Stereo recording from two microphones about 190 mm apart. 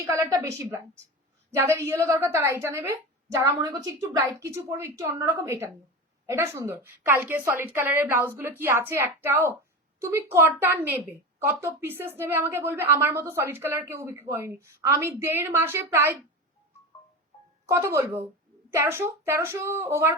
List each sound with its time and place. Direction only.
0.0 s a woman's voice: 15° right (ahead or behind)
17.7 s a woman's voice: 15° right (ahead or behind)